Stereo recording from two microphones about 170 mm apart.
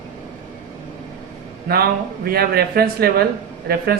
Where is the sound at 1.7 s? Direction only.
65° right (ahead or behind).